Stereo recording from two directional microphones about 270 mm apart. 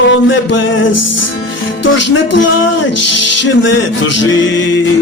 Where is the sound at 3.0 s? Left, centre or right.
Left.